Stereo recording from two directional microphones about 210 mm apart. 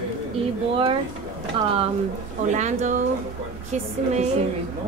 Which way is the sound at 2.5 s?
35° right (ahead or behind).